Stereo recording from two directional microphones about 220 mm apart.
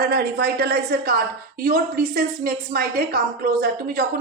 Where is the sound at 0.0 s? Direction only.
45° right (ahead or behind).